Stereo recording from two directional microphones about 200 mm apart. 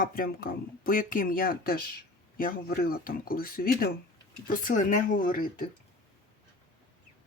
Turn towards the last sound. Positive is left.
turn(degrees=45)  # may be behind; listen again after turning